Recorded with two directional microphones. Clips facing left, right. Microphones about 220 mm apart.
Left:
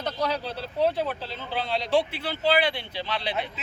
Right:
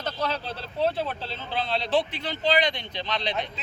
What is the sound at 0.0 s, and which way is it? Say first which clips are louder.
A man's voice: left 2 dB; 15° left (ahead or behind).